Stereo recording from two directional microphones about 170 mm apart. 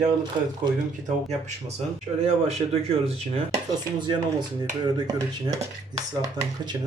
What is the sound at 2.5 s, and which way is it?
Speech, 35° right (ahead or behind).